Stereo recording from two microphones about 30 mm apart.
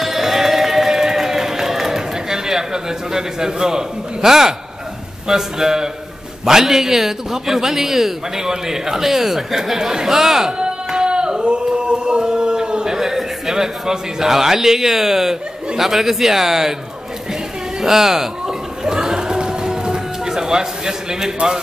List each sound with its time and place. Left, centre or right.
0.0 s run: centre
5.3 s a man's voice: centre
11.0 s a sound: right
11.4 s male singing: right; by 15.3 s centre
15.8 s a man's voice: centre
17.8 s a man's voice: centre
18.9 s music: right